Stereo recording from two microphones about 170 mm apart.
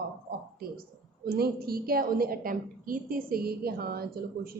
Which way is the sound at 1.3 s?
65° right (ahead or behind).